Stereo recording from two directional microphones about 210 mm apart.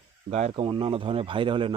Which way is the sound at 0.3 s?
30° right (ahead or behind).